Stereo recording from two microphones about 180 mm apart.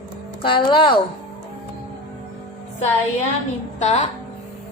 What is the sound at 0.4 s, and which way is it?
Speech, 30° left (ahead or behind).